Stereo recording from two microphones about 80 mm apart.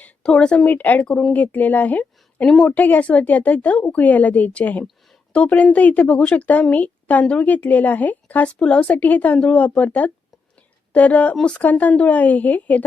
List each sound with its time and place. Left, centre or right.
0.0 s speech: centre